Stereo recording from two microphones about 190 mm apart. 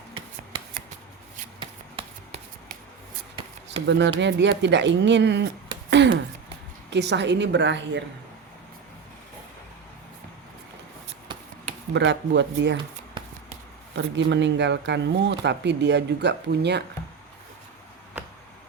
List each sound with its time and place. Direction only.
3.8 s speech: 70° right (ahead or behind)
11.9 s speech: 70° right (ahead or behind)
13.9 s speech: 70° right (ahead or behind)